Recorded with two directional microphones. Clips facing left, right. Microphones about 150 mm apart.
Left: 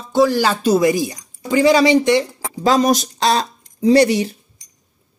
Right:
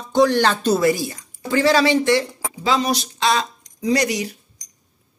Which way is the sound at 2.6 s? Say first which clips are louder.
Left 6 dB; 45° left (ahead or behind).